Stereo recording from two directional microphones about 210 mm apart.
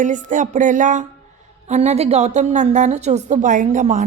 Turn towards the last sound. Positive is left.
turn(degrees=-35)  # may be behind; listen again after turning